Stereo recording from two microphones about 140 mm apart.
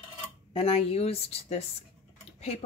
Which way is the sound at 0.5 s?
45° left (ahead or behind).